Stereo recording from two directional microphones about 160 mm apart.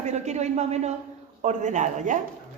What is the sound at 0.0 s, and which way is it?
Speech, 45° right (ahead or behind).